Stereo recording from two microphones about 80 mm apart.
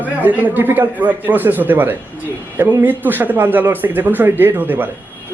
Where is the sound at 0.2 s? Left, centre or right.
Right.